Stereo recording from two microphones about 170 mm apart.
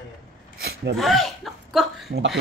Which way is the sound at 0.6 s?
75° right (ahead or behind).